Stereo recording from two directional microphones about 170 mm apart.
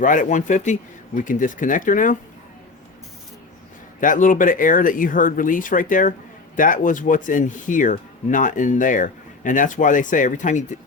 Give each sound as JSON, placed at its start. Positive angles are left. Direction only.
{"t": 0.0, "sound": "speech", "side_deg": 50}
{"t": 4.0, "sound": "speech", "side_deg": 50}